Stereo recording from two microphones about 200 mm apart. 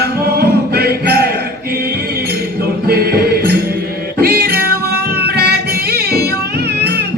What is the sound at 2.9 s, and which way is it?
Music, 50° right (ahead or behind).